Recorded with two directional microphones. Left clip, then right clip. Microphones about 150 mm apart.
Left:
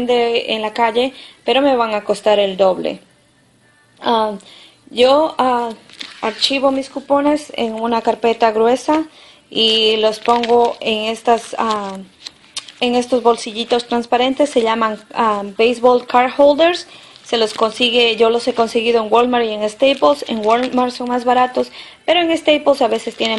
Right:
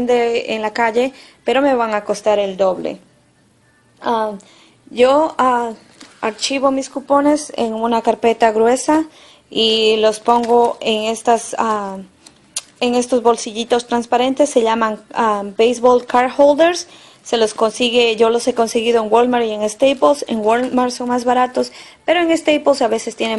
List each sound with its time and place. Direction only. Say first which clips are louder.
0.1 s speech: left 1 dB; 40° right (ahead or behind)
1.0 s a woman's voice: left 1 dB; 10° left (ahead or behind)
2.2 s speech: left 3 dB; 25° left (ahead or behind)
4.0 s speech: left 2 dB; 25° left (ahead or behind)
4.9 s a woman's voice: even; 10° left (ahead or behind)